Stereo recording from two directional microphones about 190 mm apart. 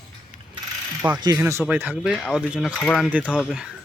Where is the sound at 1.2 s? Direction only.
15° right (ahead or behind).